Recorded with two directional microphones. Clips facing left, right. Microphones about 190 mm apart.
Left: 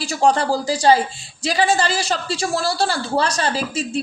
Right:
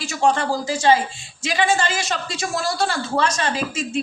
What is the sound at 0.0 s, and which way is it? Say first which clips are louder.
A woman's voice: left 2 dB; 35° left (ahead or behind).